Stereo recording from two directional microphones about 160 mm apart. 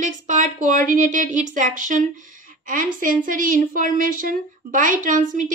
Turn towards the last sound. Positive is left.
turn(degrees=-55)  # may be behind; listen again after turning